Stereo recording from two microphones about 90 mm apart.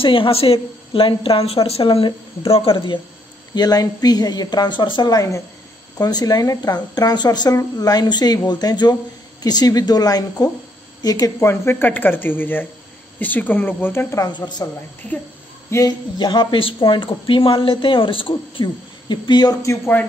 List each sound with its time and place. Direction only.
0.0 s a woman's voice: 75° left (ahead or behind)
1.8 s speech: 60° left (ahead or behind)
3.5 s speech: 45° left (ahead or behind)
5.1 s a woman's voice: 40° left (ahead or behind)
11.3 s speech: 30° left (ahead or behind)
14.3 s speech: 50° left (ahead or behind)
15.7 s speech: 30° left (ahead or behind)
16.2 s speech: 55° left (ahead or behind); by 18.3 s 75° left (ahead or behind)
18.3 s speech: 60° left (ahead or behind)